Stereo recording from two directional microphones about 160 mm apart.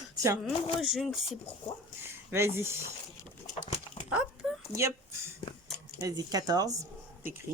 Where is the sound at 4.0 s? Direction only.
35° left (ahead or behind).